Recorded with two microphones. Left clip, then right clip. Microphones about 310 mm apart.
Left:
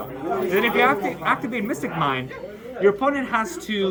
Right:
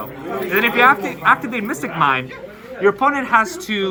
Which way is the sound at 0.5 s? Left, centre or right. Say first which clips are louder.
Right 6 dB; centre.